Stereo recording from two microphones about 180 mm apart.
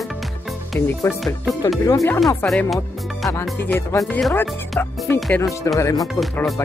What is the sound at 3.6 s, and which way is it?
Music, 10° left (ahead or behind).